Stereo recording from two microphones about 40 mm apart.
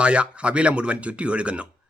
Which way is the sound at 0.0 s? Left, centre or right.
Right.